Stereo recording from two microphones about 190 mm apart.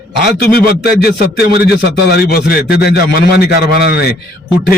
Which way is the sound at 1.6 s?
60° left (ahead or behind).